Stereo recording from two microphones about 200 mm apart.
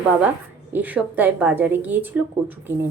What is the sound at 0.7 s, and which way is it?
A woman's voice, 10° right (ahead or behind).